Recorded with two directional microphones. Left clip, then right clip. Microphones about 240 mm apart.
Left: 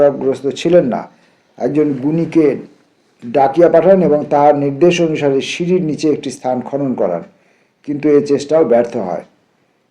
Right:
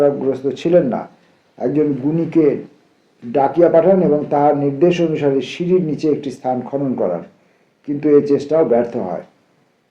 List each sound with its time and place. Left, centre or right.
0.0 s a man's voice: left